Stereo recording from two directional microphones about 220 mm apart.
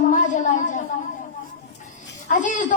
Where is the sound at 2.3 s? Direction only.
35° left (ahead or behind).